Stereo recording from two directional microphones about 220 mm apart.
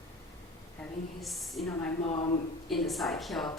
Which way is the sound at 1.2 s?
Centre (ahead or behind).